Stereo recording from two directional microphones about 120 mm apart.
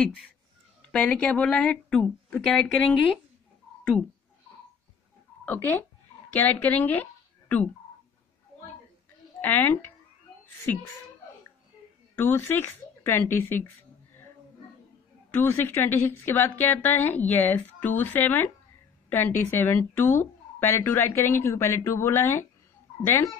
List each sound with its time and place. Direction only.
0.8 s a woman's voice: 10° left (ahead or behind)
5.4 s speech: 15° left (ahead or behind)
9.4 s a woman's voice: 15° left (ahead or behind)
12.2 s speech: 20° left (ahead or behind)
15.3 s a woman's voice: 20° left (ahead or behind)